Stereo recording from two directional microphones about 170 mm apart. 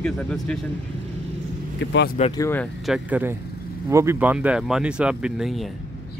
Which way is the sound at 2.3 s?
15° left (ahead or behind).